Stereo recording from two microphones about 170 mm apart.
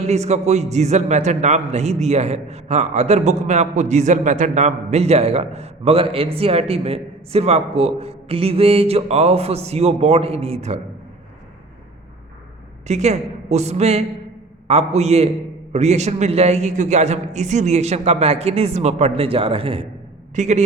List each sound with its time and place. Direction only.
0.0 s a man's voice: 40° right (ahead or behind)
12.9 s a man's voice: 40° right (ahead or behind)
20.3 s a man's voice: 45° right (ahead or behind)